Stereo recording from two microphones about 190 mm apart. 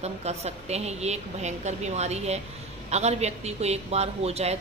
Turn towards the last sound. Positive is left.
turn(degrees=-35)  # may be behind; listen again after turning